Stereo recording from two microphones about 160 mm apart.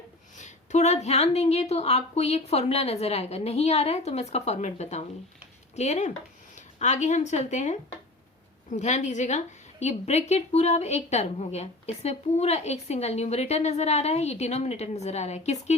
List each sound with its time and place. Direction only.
0.3 s a woman's voice: 45° left (ahead or behind)